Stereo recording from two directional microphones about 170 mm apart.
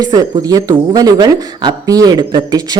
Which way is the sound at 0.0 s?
20° right (ahead or behind).